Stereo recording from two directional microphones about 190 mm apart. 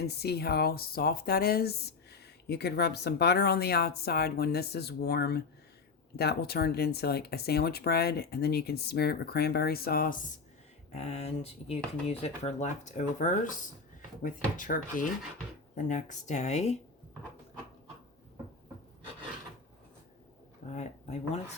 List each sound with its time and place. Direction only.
0.0 s speech: 55° left (ahead or behind)
10.9 s speech: 35° left (ahead or behind)
20.7 s speech: 35° left (ahead or behind)